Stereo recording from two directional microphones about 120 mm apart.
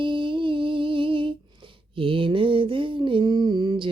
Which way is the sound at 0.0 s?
45° right (ahead or behind).